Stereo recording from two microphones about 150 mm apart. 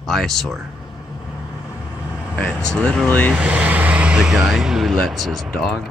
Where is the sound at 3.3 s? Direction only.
10° right (ahead or behind).